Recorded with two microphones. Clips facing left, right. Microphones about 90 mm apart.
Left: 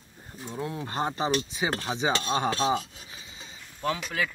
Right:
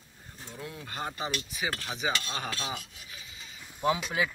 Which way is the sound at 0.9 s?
30° left (ahead or behind).